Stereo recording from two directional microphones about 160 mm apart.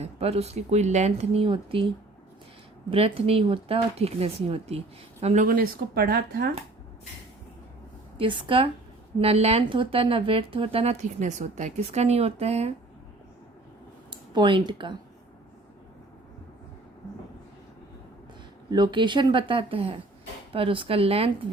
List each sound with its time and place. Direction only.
0.0 s speech: 40° right (ahead or behind)
2.9 s speech: 35° right (ahead or behind); by 6.5 s 70° right (ahead or behind)
8.2 s speech: 30° right (ahead or behind)
14.1 s speech: 30° right (ahead or behind)
18.7 s speech: 30° right (ahead or behind)